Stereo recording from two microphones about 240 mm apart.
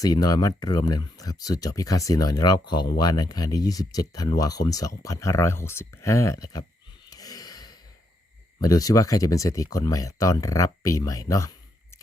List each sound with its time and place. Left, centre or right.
0.0 s speech: centre
7.1 s gasp: centre
8.6 s speech: centre